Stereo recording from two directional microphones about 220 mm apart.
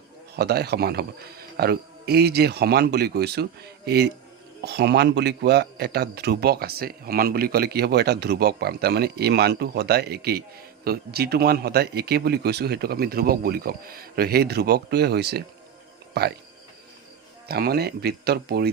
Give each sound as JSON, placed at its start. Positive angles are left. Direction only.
{"t": 0.3, "sound": "a man's voice", "side_deg": -45}
{"t": 17.5, "sound": "a man's voice", "side_deg": -45}